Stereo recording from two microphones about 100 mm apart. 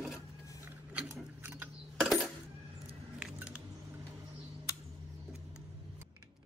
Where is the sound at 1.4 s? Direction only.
20° right (ahead or behind).